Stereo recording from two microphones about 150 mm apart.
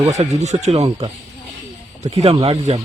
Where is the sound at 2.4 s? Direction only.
40° right (ahead or behind).